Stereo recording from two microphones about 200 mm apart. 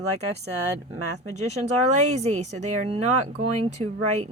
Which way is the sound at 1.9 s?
35° right (ahead or behind).